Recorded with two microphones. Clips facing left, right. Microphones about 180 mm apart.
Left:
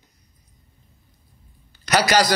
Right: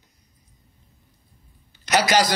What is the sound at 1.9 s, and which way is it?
Speech, 25° right (ahead or behind).